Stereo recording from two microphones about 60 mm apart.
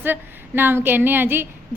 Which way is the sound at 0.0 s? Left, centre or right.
Right.